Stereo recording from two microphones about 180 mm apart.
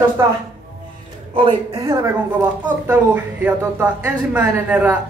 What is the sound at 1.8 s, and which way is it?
A woman's voice, 15° right (ahead or behind).